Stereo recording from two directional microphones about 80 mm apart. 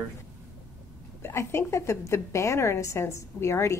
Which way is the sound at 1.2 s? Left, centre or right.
Left.